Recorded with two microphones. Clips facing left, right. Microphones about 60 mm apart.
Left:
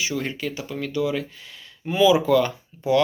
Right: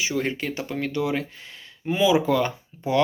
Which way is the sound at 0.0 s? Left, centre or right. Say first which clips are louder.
Right 1 dB; right.